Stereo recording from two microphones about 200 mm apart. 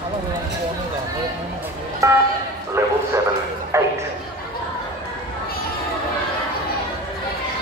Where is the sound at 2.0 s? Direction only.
15° right (ahead or behind).